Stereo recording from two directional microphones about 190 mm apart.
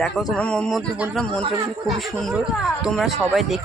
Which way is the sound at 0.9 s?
5° right (ahead or behind).